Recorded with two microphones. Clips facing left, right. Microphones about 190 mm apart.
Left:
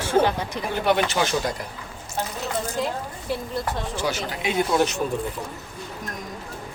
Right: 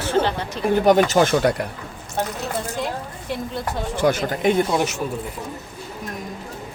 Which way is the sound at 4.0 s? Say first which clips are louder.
Right 10 dB; 55° right (ahead or behind).